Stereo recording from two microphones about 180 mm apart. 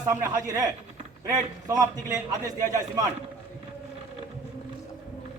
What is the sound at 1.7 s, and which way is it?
A man's voice, 20° right (ahead or behind).